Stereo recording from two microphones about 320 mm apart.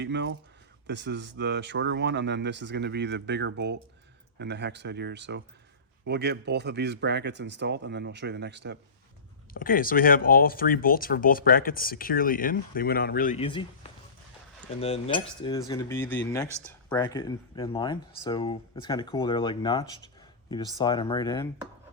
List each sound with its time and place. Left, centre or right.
0.0 s speech: right
9.5 s speech: left
14.8 s speech: centre